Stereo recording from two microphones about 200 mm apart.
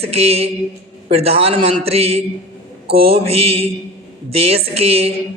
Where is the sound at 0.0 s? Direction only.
30° right (ahead or behind).